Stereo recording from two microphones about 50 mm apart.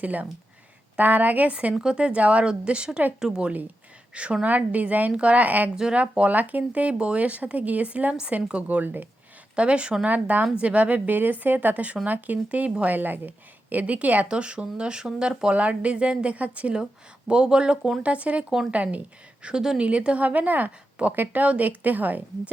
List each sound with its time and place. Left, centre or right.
0.0 s a woman's voice: right
1.7 s a woman's voice: centre; by 5.7 s right
5.7 s speech: centre
6.0 s a woman's voice: right
8.6 s a woman's voice: right
9.6 s speech: right
10.1 s a woman's voice: right
11.1 s a woman's voice: right; by 15.5 s centre
15.5 s speech: right
16.7 s a woman's voice: centre; by 22.2 s right